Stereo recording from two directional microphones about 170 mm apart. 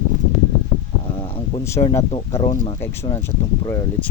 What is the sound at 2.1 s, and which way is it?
Speech, 35° left (ahead or behind).